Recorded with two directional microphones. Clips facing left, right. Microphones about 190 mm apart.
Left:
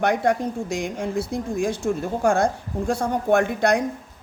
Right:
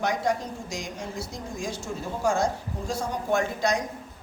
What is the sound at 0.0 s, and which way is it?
A man's voice, 60° left (ahead or behind).